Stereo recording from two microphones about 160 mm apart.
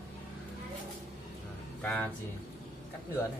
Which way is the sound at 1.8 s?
5° left (ahead or behind).